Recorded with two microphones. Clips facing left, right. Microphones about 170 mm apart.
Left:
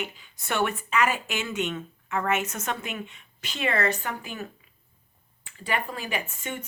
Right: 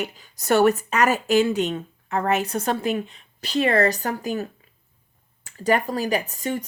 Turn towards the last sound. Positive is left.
turn(degrees=-35)  # may be behind; listen again after turning